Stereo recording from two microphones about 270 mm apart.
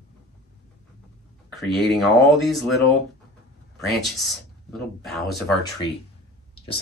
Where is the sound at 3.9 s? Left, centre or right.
Centre.